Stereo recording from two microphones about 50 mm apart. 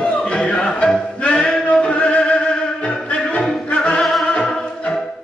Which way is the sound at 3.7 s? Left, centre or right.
Left.